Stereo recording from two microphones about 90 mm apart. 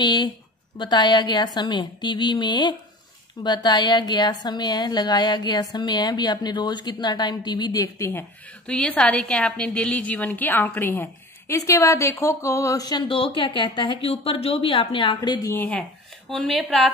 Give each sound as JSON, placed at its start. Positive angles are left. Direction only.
{"t": 0.0, "sound": "a woman's voice", "side_deg": 55}
{"t": 8.6, "sound": "a woman's voice", "side_deg": 10}
{"t": 13.1, "sound": "a woman's voice", "side_deg": 70}
{"t": 15.1, "sound": "a woman's voice", "side_deg": 40}
{"t": 15.5, "sound": "a woman's voice", "side_deg": 20}
{"t": 16.3, "sound": "a woman's voice", "side_deg": 0}